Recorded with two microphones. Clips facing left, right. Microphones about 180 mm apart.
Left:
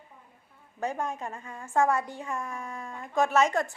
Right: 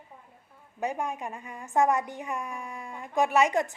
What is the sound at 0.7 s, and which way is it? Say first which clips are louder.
A woman's voice: right 1 dB; 15° right (ahead or behind).